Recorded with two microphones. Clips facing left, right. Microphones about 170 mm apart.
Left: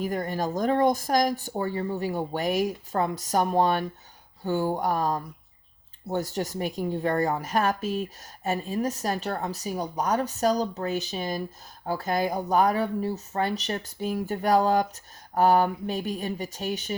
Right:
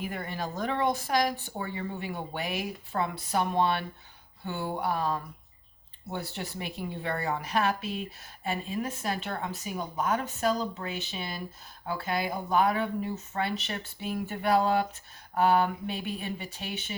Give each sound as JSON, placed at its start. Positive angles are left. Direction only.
{"t": 0.0, "sound": "a woman's voice", "side_deg": 40}